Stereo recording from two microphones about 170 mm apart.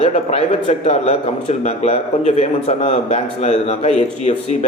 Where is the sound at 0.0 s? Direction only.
40° left (ahead or behind).